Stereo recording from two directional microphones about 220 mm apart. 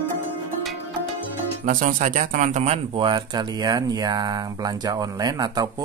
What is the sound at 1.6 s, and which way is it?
A man's voice, 35° right (ahead or behind).